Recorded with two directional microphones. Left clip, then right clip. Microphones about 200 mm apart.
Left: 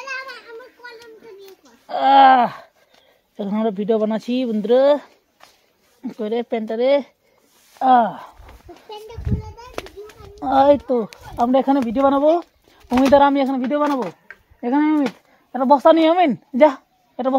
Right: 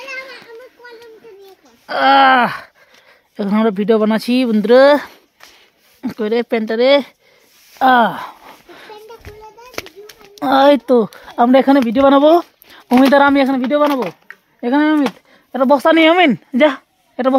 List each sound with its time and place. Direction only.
1.9 s groan: 30° right (ahead or behind)
3.3 s speech: 35° right (ahead or behind)
9.8 s speech: 40° right (ahead or behind)
12.8 s speech: 25° right (ahead or behind)
14.2 s a sound: 30° right (ahead or behind)
15.5 s a woman's voice: 35° right (ahead or behind)